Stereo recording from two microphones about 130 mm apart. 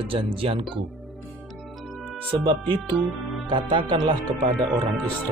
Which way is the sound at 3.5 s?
40° right (ahead or behind).